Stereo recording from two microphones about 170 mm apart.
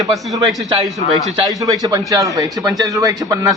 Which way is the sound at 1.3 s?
20° right (ahead or behind).